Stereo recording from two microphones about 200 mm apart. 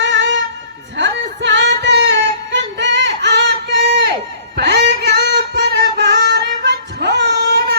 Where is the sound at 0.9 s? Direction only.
65° right (ahead or behind).